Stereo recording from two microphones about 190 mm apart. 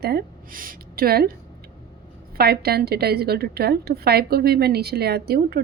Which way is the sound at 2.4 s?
55° right (ahead or behind).